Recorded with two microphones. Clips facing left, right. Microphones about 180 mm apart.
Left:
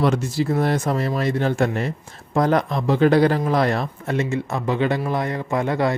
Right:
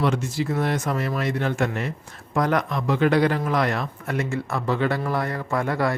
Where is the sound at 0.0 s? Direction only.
35° left (ahead or behind).